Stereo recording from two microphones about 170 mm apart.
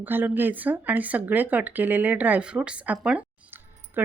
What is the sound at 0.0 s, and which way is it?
A woman's voice, 10° right (ahead or behind).